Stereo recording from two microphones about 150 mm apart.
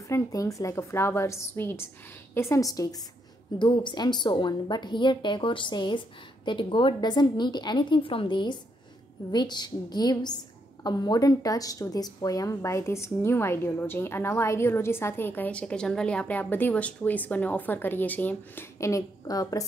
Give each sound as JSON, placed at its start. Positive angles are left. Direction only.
{"t": 0.1, "sound": "a woman's voice", "side_deg": 20}